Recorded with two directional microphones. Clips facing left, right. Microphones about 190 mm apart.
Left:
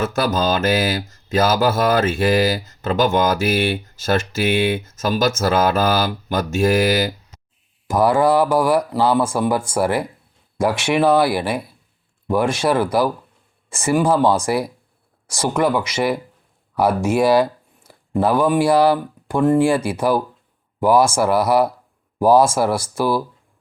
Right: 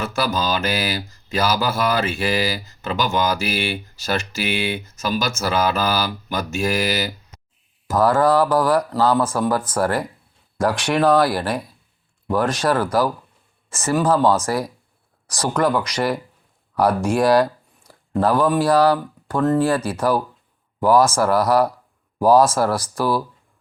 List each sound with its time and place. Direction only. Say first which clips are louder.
0.0 s mantra: left 3 dB; 45° left (ahead or behind)
7.9 s speech: left 1 dB; 10° left (ahead or behind)